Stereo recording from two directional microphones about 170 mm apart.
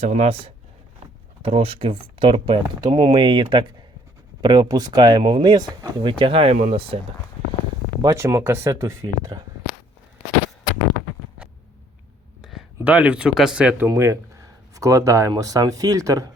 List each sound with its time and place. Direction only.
0.0 s speech: 45° right (ahead or behind)
8.0 s speech: 15° right (ahead or behind)
12.4 s speech: centre (ahead or behind)
13.8 s speech: 20° right (ahead or behind)